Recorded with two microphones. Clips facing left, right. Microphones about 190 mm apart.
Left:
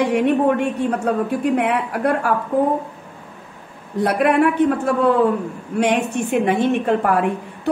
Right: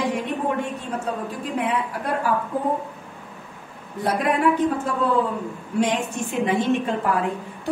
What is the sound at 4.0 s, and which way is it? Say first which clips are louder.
A woman's voice: left 6 dB; 65° left (ahead or behind).